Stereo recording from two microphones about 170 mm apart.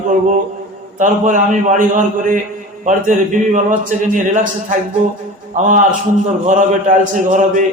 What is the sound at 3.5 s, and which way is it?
A man's voice, 45° right (ahead or behind).